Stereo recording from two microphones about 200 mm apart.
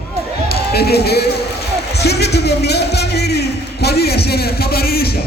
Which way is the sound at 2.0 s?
55° left (ahead or behind).